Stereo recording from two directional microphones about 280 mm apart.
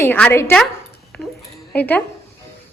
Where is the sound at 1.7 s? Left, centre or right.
Centre.